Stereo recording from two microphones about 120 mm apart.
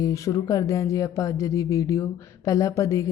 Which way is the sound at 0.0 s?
25° left (ahead or behind).